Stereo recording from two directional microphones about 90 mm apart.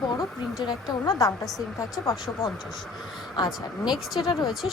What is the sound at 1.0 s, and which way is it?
Speech, 40° left (ahead or behind).